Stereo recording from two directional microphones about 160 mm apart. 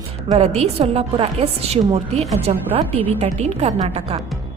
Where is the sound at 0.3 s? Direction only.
45° right (ahead or behind).